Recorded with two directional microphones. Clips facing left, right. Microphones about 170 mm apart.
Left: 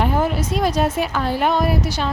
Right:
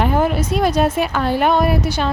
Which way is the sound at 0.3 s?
60° right (ahead or behind).